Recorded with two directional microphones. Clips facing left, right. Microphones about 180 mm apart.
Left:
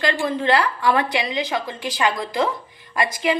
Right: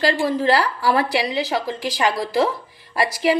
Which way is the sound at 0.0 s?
35° right (ahead or behind).